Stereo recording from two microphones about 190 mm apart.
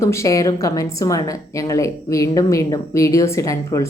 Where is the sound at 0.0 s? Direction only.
15° left (ahead or behind).